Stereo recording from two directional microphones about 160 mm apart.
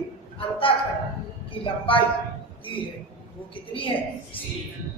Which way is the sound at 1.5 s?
35° left (ahead or behind).